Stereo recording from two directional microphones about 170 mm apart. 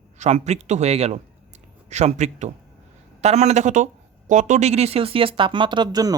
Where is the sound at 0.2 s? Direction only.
40° right (ahead or behind).